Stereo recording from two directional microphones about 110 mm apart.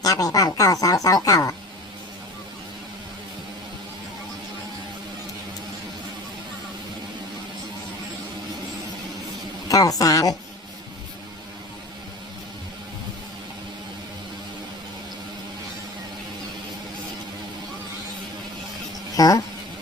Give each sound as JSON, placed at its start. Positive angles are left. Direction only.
{"t": 0.0, "sound": "speech", "side_deg": 35}
{"t": 9.6, "sound": "a sound", "side_deg": 35}
{"t": 19.1, "sound": "insect", "side_deg": 35}